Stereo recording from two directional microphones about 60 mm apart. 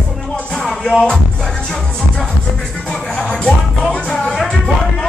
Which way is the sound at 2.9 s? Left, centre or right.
Centre.